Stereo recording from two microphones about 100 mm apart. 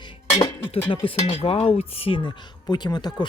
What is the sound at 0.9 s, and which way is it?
Speech, 75° left (ahead or behind).